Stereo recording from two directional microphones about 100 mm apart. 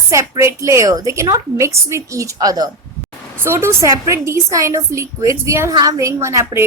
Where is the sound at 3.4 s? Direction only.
25° right (ahead or behind).